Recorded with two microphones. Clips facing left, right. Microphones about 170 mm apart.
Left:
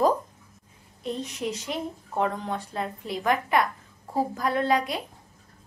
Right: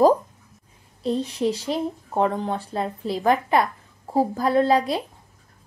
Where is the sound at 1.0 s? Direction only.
30° right (ahead or behind).